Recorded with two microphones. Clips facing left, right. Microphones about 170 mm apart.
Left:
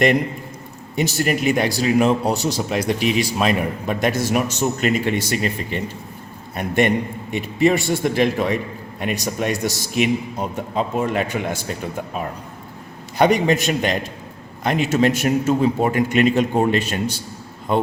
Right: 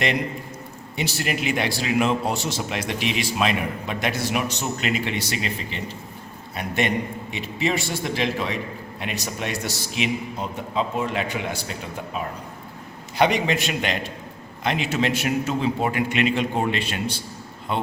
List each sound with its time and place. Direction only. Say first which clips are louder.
0.9 s a man's voice: left 6 dB; 45° left (ahead or behind)
13.1 s a man's voice: left 4 dB; 45° left (ahead or behind)